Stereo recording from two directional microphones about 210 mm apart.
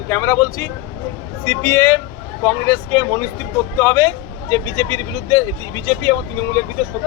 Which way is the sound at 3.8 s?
15° left (ahead or behind).